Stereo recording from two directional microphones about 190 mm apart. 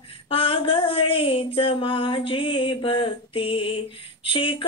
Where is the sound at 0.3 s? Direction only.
30° left (ahead or behind).